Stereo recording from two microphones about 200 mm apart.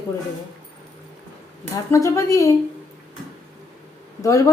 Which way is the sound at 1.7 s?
15° left (ahead or behind).